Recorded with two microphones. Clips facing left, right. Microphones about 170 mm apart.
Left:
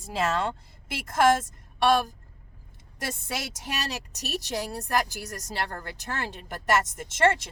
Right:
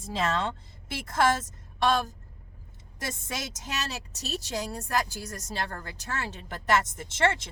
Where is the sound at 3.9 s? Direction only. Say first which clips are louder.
Left 2 dB; 15° left (ahead or behind).